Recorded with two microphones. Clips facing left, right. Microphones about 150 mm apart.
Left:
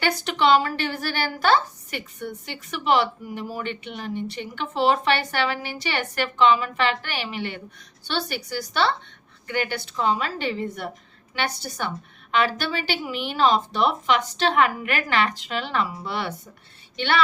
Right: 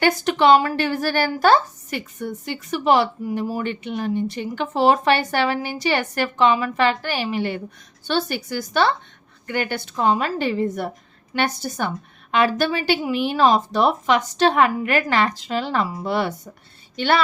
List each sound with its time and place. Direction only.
0.0 s a woman's voice: 50° right (ahead or behind)